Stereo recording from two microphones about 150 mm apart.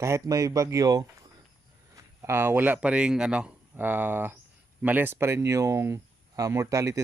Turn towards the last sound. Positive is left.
turn(degrees=-20)  # may be behind; listen again after turning